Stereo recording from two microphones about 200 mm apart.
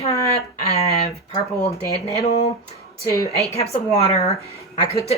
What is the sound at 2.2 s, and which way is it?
Speech, 30° left (ahead or behind).